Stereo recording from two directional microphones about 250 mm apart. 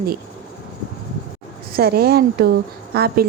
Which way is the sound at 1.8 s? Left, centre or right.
Right.